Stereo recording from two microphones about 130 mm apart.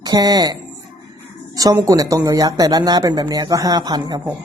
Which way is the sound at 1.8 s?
25° right (ahead or behind).